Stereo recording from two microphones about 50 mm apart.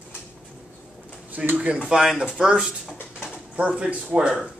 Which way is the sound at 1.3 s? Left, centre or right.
Right.